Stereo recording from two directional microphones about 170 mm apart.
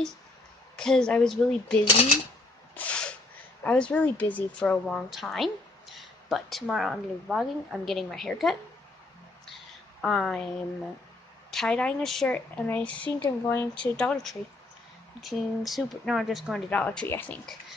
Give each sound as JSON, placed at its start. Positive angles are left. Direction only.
{"t": 0.7, "sound": "a woman's voice", "side_deg": 5}
{"t": 2.7, "sound": "a sound", "side_deg": 5}
{"t": 3.6, "sound": "a woman's voice", "side_deg": 5}
{"t": 10.0, "sound": "a woman's voice", "side_deg": 5}
{"t": 11.5, "sound": "a woman's voice", "side_deg": 5}